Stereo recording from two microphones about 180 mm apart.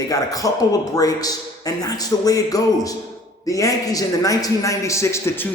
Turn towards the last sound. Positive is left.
turn(degrees=15)  # may be behind; listen again after turning